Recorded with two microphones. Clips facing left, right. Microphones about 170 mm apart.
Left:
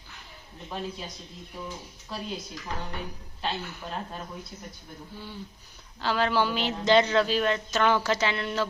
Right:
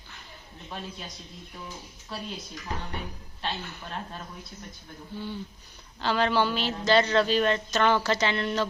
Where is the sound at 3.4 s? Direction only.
5° left (ahead or behind).